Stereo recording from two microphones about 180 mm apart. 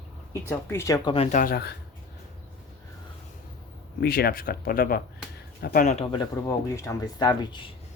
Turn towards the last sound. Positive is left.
turn(degrees=25)  # may be behind; listen again after turning